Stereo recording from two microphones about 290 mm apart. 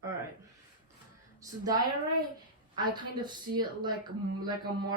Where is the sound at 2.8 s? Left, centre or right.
Centre.